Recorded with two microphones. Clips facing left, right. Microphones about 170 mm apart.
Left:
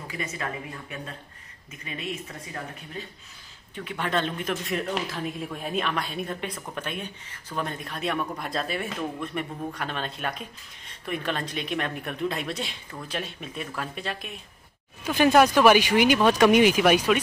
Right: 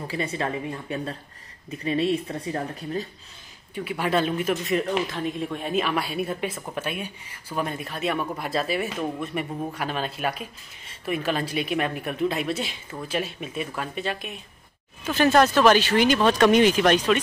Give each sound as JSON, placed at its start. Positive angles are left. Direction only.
{"t": 0.1, "sound": "speech", "side_deg": -30}
{"t": 3.7, "sound": "speech", "side_deg": -10}
{"t": 15.0, "sound": "speech", "side_deg": 10}